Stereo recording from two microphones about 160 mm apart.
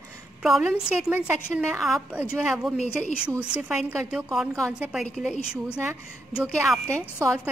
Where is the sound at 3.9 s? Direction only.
10° right (ahead or behind).